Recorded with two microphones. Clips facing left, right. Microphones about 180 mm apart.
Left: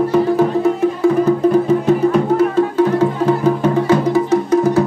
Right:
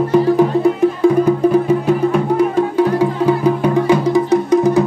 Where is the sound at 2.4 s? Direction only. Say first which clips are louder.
Even; 15° right (ahead or behind).